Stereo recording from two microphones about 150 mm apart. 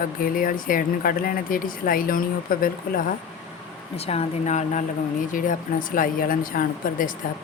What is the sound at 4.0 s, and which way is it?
Speech, 40° left (ahead or behind).